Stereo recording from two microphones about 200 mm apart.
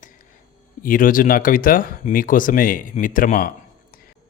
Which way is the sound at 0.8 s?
45° left (ahead or behind).